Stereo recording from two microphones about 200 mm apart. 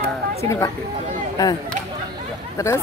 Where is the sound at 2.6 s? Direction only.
15° left (ahead or behind).